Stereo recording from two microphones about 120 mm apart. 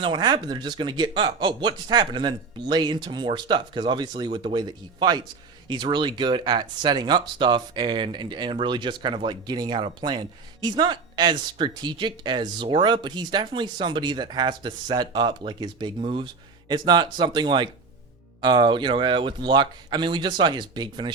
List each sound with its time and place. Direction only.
0.0 s speech: 40° right (ahead or behind)